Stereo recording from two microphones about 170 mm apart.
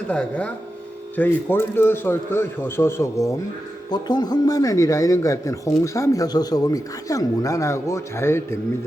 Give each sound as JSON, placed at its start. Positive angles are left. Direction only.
{"t": 0.1, "sound": "a man's voice", "side_deg": 5}